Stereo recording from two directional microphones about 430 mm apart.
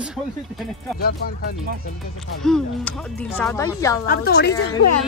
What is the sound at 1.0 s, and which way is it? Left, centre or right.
Speech, left.